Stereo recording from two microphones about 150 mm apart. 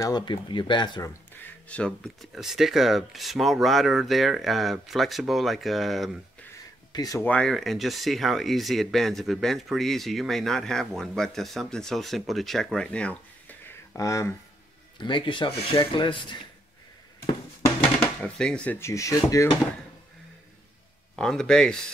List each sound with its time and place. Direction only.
0.0 s speech: 30° left (ahead or behind)
1.7 s speech: 5° left (ahead or behind)
6.9 s speech: 25° left (ahead or behind)
7.2 s speech: 5° left (ahead or behind)
15.0 s speech: 30° left (ahead or behind)
17.6 s speech: 10° left (ahead or behind)
21.2 s speech: 5° left (ahead or behind)